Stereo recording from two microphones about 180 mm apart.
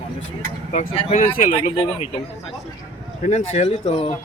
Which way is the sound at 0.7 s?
40° left (ahead or behind).